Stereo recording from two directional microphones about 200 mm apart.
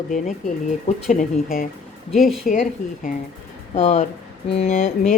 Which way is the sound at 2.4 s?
40° left (ahead or behind).